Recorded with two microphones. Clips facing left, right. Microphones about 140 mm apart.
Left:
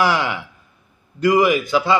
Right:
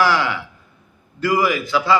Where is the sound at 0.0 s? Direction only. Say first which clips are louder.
Right 1 dB; 15° left (ahead or behind).